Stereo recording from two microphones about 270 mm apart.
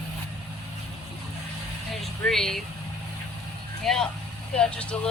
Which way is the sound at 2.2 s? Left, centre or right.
Centre.